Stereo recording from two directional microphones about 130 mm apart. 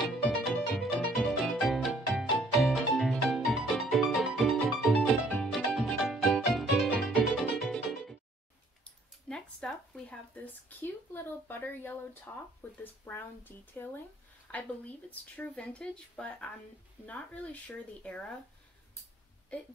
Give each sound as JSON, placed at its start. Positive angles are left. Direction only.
{"t": 0.5, "sound": "music", "side_deg": 0}
{"t": 9.3, "sound": "a sound", "side_deg": 5}
{"t": 12.7, "sound": "speech", "side_deg": 15}